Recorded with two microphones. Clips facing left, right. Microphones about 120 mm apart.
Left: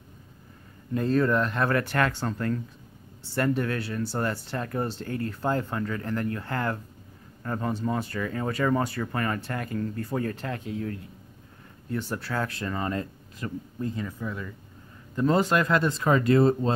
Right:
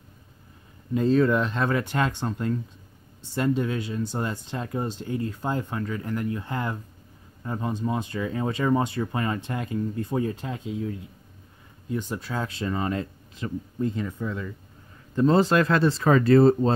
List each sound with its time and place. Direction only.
0.9 s speech: 20° right (ahead or behind)
11.9 s speech: 15° right (ahead or behind)
15.1 s speech: 25° right (ahead or behind)